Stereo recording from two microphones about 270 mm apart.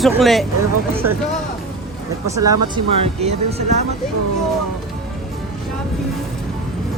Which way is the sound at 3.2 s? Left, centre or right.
Right.